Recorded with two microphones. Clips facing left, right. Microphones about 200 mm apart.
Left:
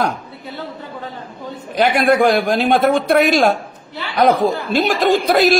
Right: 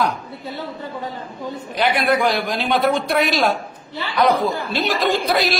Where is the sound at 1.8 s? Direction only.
50° left (ahead or behind).